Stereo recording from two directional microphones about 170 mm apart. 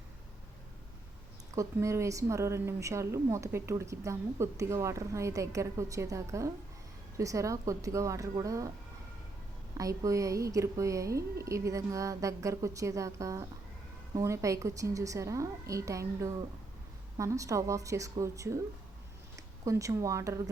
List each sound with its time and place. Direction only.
1.5 s a woman's voice: 15° right (ahead or behind)
9.7 s a woman's voice: 20° right (ahead or behind)
19.6 s a woman's voice: 20° right (ahead or behind)